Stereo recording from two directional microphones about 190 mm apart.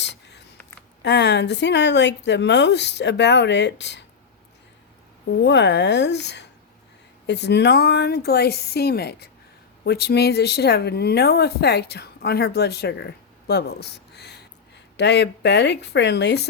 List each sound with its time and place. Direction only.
0.0 s a sound: 65° left (ahead or behind)
1.0 s speech: 65° left (ahead or behind)
5.4 s speech: 65° left (ahead or behind)